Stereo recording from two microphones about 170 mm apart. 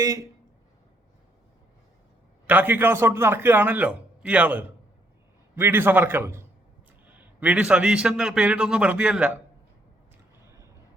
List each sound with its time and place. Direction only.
0.0 s speech: 20° right (ahead or behind)
2.5 s a man's voice: 10° right (ahead or behind)
10.4 s a sound: 20° right (ahead or behind)